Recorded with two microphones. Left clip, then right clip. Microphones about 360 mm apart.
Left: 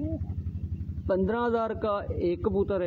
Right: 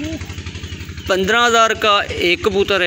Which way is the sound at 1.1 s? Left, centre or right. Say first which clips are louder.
Right 13 dB; left.